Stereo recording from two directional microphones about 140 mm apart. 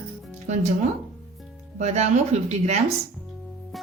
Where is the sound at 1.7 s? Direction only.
55° right (ahead or behind).